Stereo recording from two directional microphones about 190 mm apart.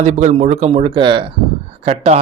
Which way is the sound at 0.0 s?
40° right (ahead or behind).